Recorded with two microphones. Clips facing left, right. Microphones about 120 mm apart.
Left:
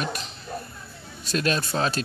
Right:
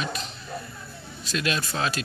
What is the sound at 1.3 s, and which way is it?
Speech, 40° left (ahead or behind).